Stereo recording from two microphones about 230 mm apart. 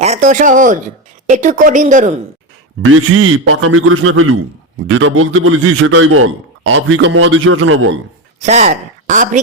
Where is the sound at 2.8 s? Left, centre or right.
Right.